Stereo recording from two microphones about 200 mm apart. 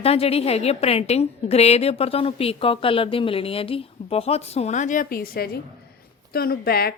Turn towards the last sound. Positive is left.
turn(degrees=50)  # may be behind; listen again after turning